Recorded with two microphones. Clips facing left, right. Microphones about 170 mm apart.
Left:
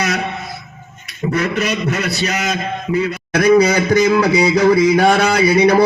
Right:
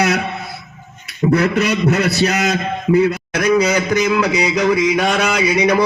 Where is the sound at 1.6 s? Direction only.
70° right (ahead or behind).